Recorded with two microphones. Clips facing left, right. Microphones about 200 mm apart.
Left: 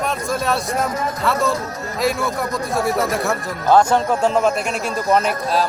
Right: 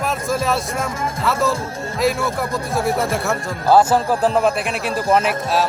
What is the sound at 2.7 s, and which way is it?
A man's voice, centre (ahead or behind).